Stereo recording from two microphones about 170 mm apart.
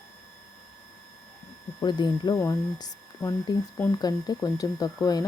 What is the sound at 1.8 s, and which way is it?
Speech, 25° left (ahead or behind).